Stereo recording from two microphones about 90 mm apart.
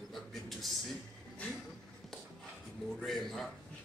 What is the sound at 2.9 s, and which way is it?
Speech, centre (ahead or behind).